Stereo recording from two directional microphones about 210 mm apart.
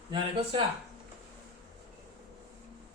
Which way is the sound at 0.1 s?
25° right (ahead or behind).